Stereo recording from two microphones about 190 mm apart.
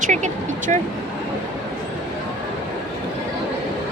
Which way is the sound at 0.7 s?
40° right (ahead or behind).